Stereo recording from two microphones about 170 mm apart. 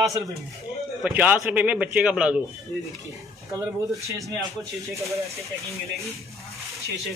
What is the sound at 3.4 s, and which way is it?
A man's voice, 20° right (ahead or behind).